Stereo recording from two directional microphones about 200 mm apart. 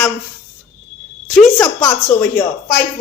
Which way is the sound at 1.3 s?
Centre (ahead or behind).